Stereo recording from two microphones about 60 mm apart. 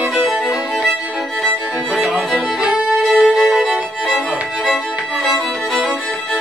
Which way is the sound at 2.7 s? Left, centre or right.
Centre.